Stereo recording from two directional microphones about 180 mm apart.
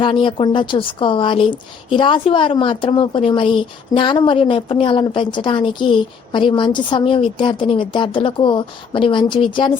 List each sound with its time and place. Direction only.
0.0 s a woman's voice: 25° left (ahead or behind)